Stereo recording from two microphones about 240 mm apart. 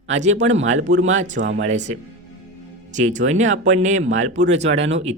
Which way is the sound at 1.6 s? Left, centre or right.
Right.